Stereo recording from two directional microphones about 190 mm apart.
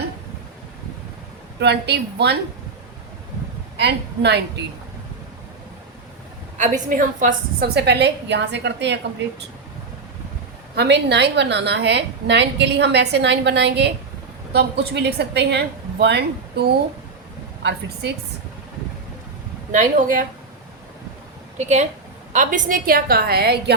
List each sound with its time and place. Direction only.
1.5 s a woman's voice: 60° right (ahead or behind)
3.8 s a woman's voice: 60° right (ahead or behind)
6.6 s a woman's voice: 40° right (ahead or behind); by 9.0 s 65° right (ahead or behind)
10.8 s a woman's voice: 65° right (ahead or behind)
19.7 s a woman's voice: 45° right (ahead or behind)
21.6 s a woman's voice: 35° right (ahead or behind); by 23.7 s 55° right (ahead or behind)